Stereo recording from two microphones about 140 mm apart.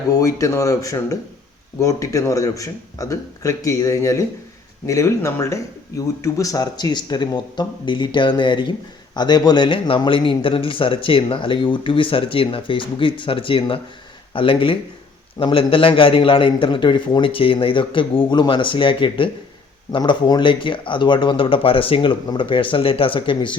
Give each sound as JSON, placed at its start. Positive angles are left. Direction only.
{"t": 0.1, "sound": "speech", "side_deg": 25}